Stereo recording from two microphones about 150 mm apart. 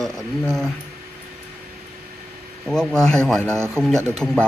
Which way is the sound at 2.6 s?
5° left (ahead or behind).